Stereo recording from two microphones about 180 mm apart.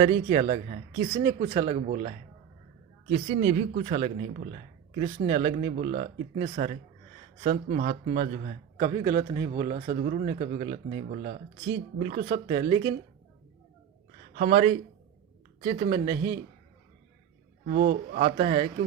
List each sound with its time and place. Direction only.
0.0 s speech: 30° right (ahead or behind)
1.1 s speech: 15° right (ahead or behind)
1.5 s speech: 35° right (ahead or behind)
1.9 s a man's voice: 45° right (ahead or behind)
7.4 s a man's voice: 50° right (ahead or behind)
8.8 s a man's voice: 25° right (ahead or behind)
9.6 s speech: 35° right (ahead or behind)
11.1 s a man's voice: 45° right (ahead or behind)
11.9 s speech: 35° right (ahead or behind)
14.3 s a man's voice: 40° right (ahead or behind)
17.7 s a man's voice: 55° right (ahead or behind)
18.3 s speech: 35° right (ahead or behind)